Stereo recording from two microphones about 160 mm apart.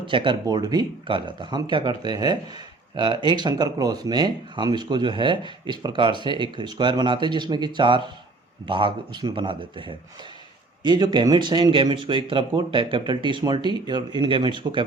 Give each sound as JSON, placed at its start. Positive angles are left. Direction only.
{"t": 0.0, "sound": "speech", "side_deg": -30}